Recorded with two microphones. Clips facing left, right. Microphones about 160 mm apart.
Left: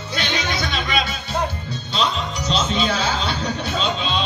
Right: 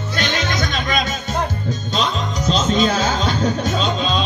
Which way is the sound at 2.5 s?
45° right (ahead or behind).